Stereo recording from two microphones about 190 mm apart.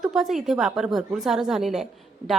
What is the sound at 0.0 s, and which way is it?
A woman's voice, centre (ahead or behind).